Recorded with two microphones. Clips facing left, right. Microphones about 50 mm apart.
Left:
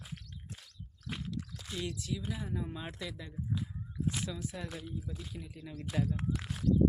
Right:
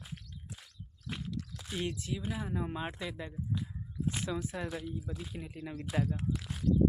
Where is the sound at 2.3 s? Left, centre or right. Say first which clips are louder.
Right 2 dB; centre.